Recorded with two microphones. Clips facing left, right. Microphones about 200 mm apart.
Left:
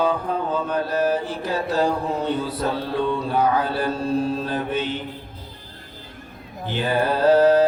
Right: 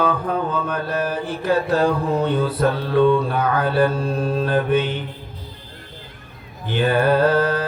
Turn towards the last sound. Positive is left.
turn(degrees=-55)  # may be behind; listen again after turning